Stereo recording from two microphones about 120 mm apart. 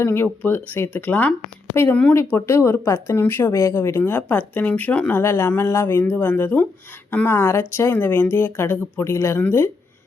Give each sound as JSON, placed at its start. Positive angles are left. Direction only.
{"t": 0.0, "sound": "speech", "side_deg": 20}